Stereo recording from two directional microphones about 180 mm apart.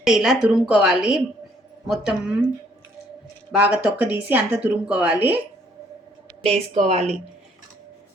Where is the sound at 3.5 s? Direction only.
5° right (ahead or behind).